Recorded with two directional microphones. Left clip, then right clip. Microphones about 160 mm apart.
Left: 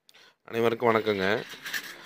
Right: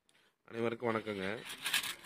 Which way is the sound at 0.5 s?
30° left (ahead or behind).